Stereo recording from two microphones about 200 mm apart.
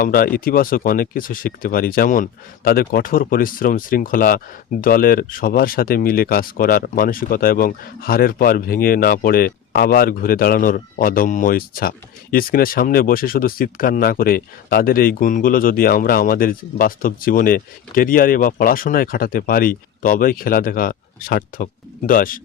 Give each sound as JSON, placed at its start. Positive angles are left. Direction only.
{"t": 0.0, "sound": "speech", "side_deg": 45}